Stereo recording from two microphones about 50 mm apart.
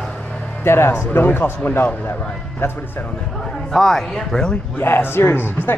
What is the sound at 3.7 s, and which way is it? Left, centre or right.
Speech, centre.